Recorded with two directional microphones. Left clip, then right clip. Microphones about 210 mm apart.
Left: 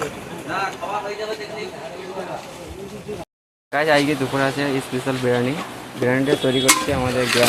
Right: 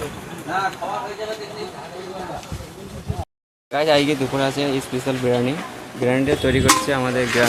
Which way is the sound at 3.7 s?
5° right (ahead or behind).